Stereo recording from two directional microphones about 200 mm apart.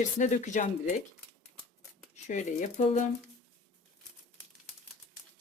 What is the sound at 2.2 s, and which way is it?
Speech, 35° left (ahead or behind).